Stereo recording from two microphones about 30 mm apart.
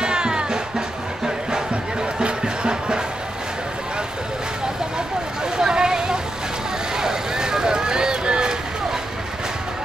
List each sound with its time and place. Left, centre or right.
0.0 s music: right
4.9 s vehicle: right